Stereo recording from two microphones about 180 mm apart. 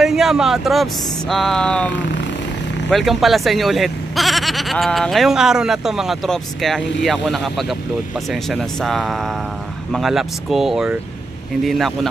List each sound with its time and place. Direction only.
0.0 s speech: centre (ahead or behind)
2.9 s speech: centre (ahead or behind)